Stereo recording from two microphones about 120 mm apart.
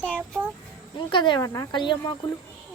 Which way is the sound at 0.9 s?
40° left (ahead or behind).